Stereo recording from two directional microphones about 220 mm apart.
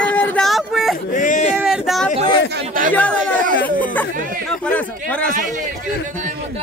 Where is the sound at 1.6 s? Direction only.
Centre (ahead or behind).